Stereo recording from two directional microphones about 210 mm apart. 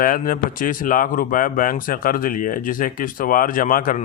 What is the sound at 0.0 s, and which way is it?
Speech, 40° left (ahead or behind).